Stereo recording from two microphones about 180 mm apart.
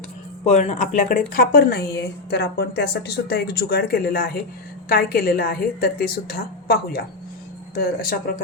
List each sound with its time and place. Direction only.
0.4 s speech: 40° left (ahead or behind)
0.9 s a woman's voice: 50° left (ahead or behind)